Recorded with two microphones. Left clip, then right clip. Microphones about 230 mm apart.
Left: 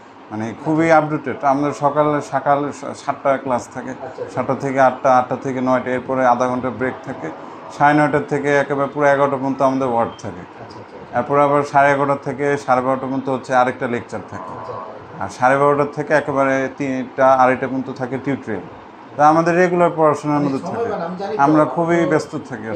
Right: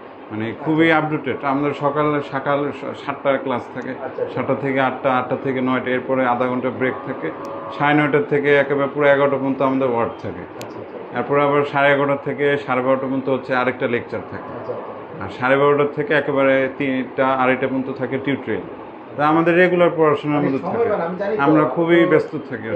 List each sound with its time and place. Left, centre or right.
0.4 s speech: left
11.1 s speech: left
15.4 s speech: left